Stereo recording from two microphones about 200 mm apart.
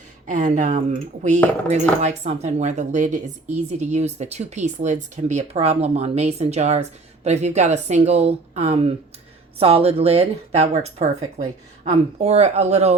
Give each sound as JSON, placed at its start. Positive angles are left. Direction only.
{"t": 0.3, "sound": "speech", "side_deg": -40}